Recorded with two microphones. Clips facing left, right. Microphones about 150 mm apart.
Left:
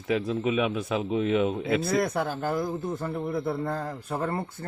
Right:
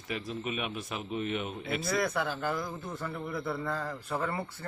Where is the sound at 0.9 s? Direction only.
90° left.